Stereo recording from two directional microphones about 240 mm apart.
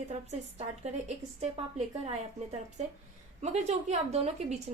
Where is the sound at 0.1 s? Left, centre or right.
Right.